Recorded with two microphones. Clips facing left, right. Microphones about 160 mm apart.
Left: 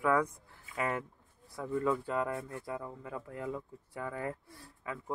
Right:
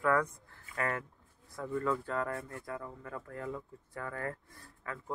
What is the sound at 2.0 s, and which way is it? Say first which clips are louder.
Speech: left 2 dB; 15° left (ahead or behind).